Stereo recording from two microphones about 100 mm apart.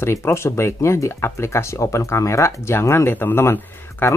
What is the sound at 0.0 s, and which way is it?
Speech, 25° left (ahead or behind).